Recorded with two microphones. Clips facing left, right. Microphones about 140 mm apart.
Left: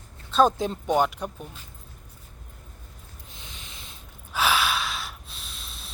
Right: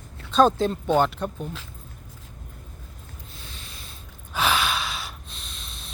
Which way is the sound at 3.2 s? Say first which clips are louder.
Even; 15° left (ahead or behind).